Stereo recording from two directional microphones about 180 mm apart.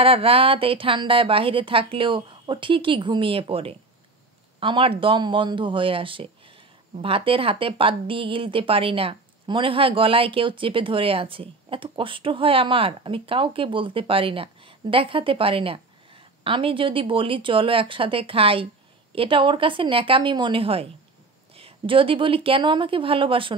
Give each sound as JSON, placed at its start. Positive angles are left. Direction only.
{"t": 0.0, "sound": "speech", "side_deg": -30}